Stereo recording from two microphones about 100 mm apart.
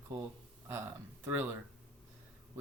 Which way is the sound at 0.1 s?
15° right (ahead or behind).